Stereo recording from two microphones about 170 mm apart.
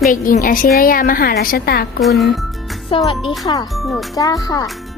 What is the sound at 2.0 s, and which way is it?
Speech, centre (ahead or behind).